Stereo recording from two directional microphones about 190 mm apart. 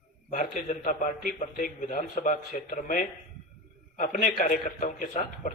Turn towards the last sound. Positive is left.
turn(degrees=40)  # may be behind; listen again after turning